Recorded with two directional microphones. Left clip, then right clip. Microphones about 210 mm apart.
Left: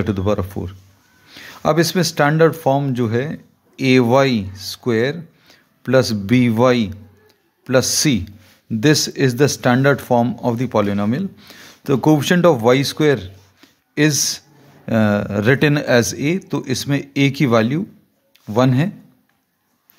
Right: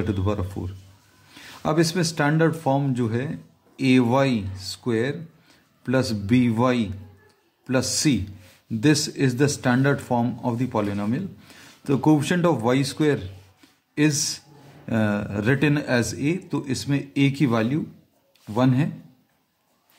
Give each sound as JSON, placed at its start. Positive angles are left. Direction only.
{"t": 0.0, "sound": "speech", "side_deg": 40}